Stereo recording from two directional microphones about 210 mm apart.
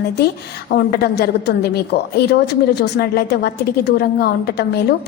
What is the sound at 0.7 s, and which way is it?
A woman's voice, 50° left (ahead or behind).